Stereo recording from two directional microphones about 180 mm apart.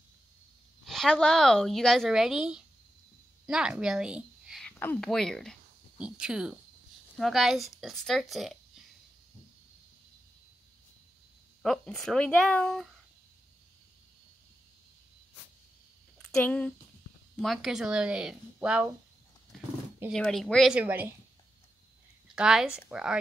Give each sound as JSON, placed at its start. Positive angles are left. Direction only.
{"t": 0.8, "sound": "speech", "side_deg": 0}
{"t": 3.4, "sound": "a sound", "side_deg": -5}
{"t": 4.7, "sound": "speech", "side_deg": 10}
{"t": 11.6, "sound": "speech", "side_deg": 0}
{"t": 16.2, "sound": "speech", "side_deg": 5}
{"t": 20.1, "sound": "speech", "side_deg": 0}
{"t": 22.3, "sound": "speech", "side_deg": -5}